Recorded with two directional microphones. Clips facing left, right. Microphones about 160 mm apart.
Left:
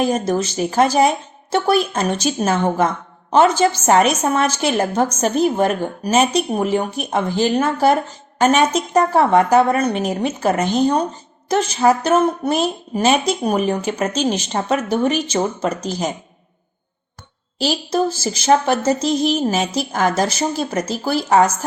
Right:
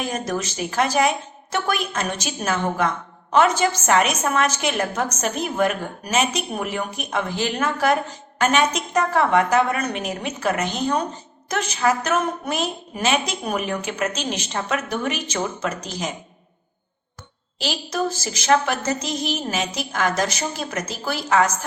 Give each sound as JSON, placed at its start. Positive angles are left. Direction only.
{"t": 0.0, "sound": "a woman's voice", "side_deg": 35}
{"t": 17.6, "sound": "a woman's voice", "side_deg": 35}